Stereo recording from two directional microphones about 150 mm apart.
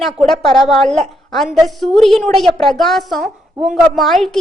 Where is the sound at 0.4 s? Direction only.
30° left (ahead or behind).